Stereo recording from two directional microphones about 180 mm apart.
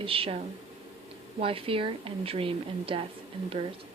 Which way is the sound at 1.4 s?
30° right (ahead or behind).